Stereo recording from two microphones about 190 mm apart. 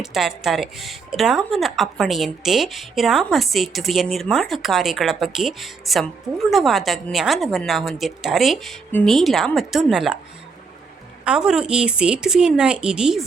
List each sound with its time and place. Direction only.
0.0 s speech: centre (ahead or behind)
11.3 s speech: 5° right (ahead or behind)